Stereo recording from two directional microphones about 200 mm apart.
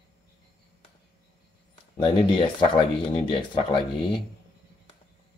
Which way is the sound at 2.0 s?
25° left (ahead or behind).